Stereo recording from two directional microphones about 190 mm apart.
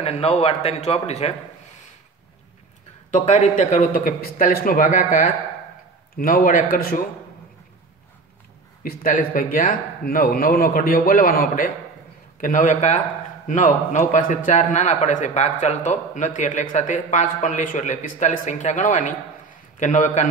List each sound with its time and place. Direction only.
0.0 s a man's voice: 30° left (ahead or behind)
3.1 s speech: 40° left (ahead or behind)
8.8 s a man's voice: 45° left (ahead or behind)